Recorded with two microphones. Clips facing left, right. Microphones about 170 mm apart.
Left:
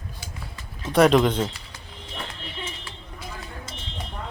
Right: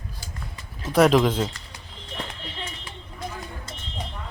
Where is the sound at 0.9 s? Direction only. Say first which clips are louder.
Even; centre (ahead or behind).